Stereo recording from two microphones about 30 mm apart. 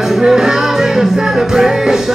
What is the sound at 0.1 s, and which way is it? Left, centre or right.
Music, centre.